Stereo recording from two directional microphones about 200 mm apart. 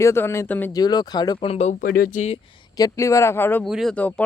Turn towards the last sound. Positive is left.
turn(degrees=5)  # may be behind; listen again after turning